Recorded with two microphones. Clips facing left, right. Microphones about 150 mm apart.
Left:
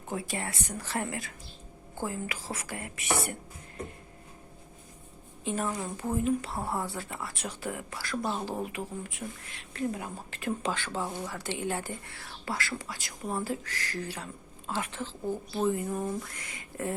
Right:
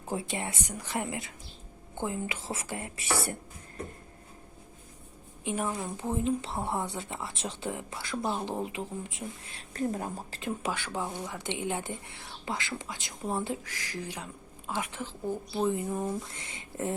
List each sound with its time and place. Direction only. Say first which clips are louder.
0.1 s speech: right 1 dB; 25° right (ahead or behind)
5.5 s speech: even; 10° right (ahead or behind)
6.0 s speech: left 2 dB; 25° right (ahead or behind)
9.7 s a woman's voice: right 2 dB; 40° right (ahead or behind)
10.6 s speech: left 1 dB; 10° right (ahead or behind)